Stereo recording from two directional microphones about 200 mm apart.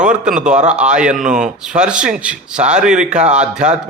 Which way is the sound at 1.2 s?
40° right (ahead or behind).